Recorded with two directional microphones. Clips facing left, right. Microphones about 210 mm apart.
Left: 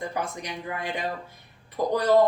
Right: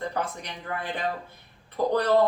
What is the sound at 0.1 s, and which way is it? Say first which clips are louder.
Speech: even; 10° left (ahead or behind).